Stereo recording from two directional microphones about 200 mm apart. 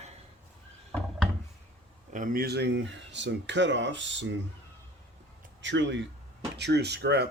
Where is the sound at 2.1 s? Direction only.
50° right (ahead or behind); by 4.3 s 65° right (ahead or behind).